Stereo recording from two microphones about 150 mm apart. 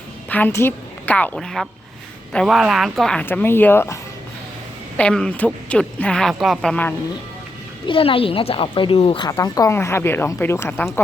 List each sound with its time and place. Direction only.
0.3 s a woman's voice: 10° left (ahead or behind)
4.9 s speech: 5° left (ahead or behind)
7.9 s a woman's voice: 35° left (ahead or behind)
9.3 s speech: 20° left (ahead or behind)